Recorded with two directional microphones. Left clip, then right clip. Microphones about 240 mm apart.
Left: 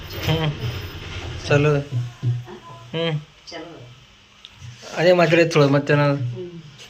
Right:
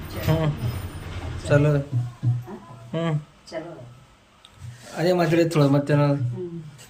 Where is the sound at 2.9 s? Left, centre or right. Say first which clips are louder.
Left 3 dB; centre.